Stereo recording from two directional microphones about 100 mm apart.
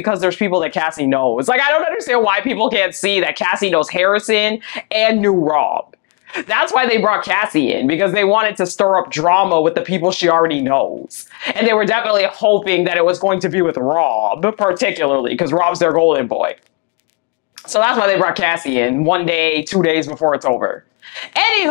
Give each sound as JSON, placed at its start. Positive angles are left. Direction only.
{"t": 0.0, "sound": "speech", "side_deg": 20}
{"t": 17.7, "sound": "speech", "side_deg": 20}